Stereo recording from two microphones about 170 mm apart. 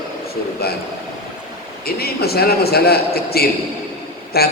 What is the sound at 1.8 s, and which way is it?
A man's voice, 65° left (ahead or behind).